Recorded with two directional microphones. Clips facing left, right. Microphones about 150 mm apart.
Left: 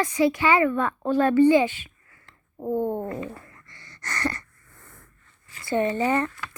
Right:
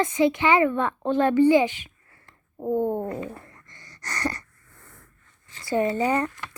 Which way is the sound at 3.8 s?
15° right (ahead or behind).